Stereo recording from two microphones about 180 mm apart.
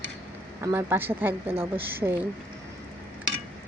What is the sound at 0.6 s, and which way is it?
A woman's voice, 15° right (ahead or behind).